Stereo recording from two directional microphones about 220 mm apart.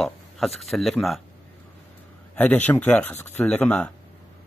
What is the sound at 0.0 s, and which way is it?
Speech, centre (ahead or behind).